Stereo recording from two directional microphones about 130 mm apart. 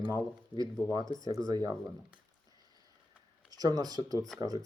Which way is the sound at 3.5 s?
30° right (ahead or behind).